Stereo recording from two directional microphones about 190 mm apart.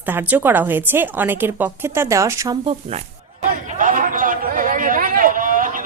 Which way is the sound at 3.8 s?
45° right (ahead or behind).